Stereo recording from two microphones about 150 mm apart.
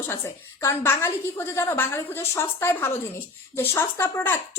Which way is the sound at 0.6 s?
20° left (ahead or behind).